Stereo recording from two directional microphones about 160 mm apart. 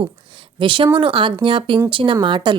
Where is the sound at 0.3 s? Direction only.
30° right (ahead or behind).